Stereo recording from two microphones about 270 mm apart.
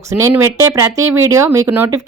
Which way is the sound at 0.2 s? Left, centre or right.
Centre.